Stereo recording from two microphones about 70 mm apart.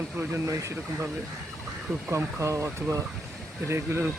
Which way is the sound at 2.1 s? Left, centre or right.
Right.